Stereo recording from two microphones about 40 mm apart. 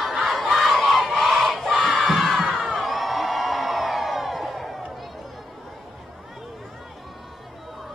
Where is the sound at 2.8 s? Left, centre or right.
Centre.